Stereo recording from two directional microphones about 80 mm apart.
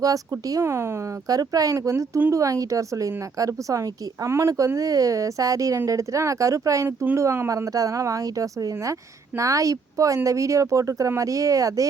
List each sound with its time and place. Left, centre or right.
0.0 s speech: right
6.8 s speech: right
7.2 s speech: right